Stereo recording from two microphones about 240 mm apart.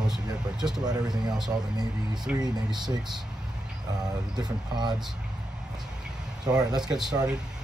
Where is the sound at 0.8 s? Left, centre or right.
Centre.